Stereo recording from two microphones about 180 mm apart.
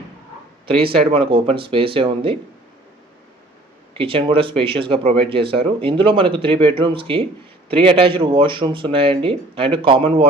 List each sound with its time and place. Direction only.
0.6 s speech: 30° right (ahead or behind)
3.9 s speech: 30° right (ahead or behind)